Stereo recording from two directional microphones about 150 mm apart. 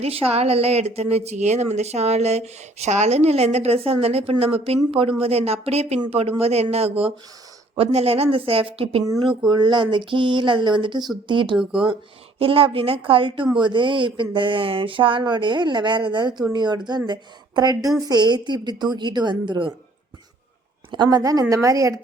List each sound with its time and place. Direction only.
0.0 s a woman's voice: 40° right (ahead or behind)
9.5 s a woman's voice: 30° right (ahead or behind)
11.5 s speech: 5° right (ahead or behind)
12.4 s a woman's voice: 40° right (ahead or behind)
20.9 s a woman's voice: 25° right (ahead or behind)